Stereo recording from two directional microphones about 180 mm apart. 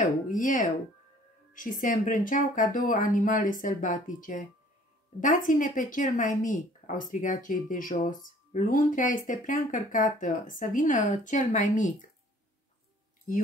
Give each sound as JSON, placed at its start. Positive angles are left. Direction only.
{"t": 0.0, "sound": "speech", "side_deg": 45}